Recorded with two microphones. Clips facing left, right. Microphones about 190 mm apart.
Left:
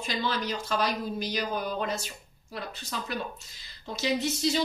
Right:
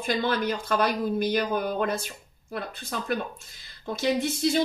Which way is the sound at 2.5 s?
50° right (ahead or behind).